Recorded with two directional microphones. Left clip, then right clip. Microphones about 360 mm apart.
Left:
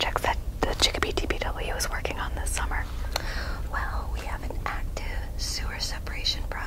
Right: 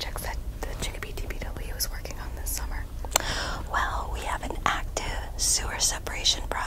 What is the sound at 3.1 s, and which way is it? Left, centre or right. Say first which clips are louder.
Whispering: right 5 dB; right.